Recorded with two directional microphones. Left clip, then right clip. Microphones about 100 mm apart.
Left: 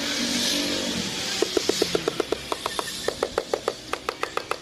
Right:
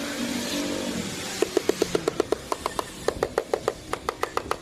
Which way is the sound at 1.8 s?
Centre (ahead or behind).